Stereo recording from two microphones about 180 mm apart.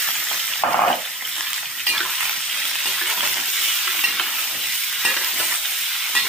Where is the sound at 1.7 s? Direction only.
Centre (ahead or behind).